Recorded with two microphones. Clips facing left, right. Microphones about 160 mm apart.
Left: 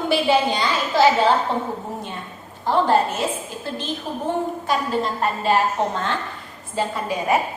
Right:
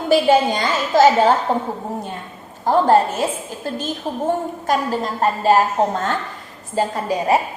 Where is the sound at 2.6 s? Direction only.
40° right (ahead or behind).